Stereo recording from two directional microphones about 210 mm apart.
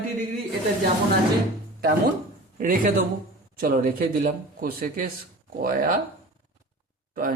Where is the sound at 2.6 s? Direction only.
40° right (ahead or behind).